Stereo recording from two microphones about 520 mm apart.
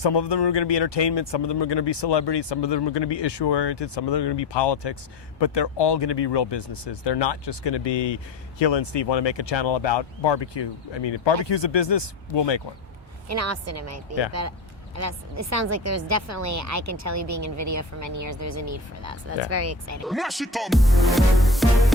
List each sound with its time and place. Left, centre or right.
0.0 s speech: left
13.2 s a woman's voice: right
20.1 s speech: centre